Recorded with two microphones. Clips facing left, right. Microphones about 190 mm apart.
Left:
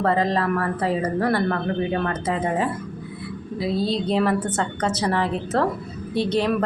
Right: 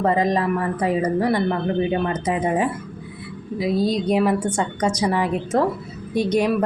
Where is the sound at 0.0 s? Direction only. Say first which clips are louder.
Right 2 dB; 15° right (ahead or behind).